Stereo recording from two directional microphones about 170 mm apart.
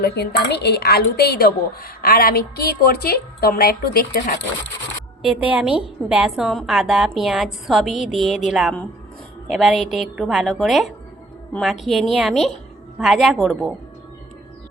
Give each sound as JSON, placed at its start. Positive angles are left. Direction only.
{"t": 0.0, "sound": "a woman's voice", "side_deg": 75}
{"t": 5.5, "sound": "a woman's voice", "side_deg": -5}